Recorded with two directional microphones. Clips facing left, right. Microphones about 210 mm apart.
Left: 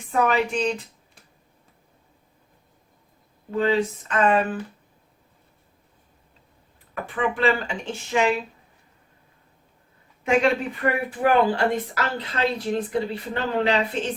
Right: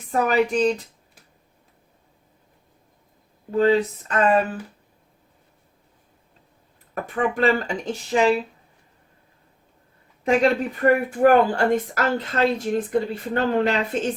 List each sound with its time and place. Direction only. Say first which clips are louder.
0.1 s speech: right 2 dB; 40° right (ahead or behind)
3.5 s speech: right 3 dB; 40° right (ahead or behind)
6.9 s speech: right 2 dB; 45° right (ahead or behind)
10.2 s a woman's voice: right 2 dB; 40° right (ahead or behind)